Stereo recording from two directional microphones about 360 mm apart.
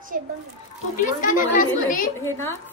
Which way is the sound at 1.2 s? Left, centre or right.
Left.